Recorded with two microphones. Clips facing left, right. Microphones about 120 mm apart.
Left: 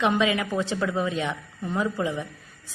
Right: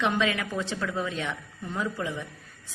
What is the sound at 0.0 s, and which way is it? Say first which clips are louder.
A woman's voice: left 3 dB; 15° left (ahead or behind).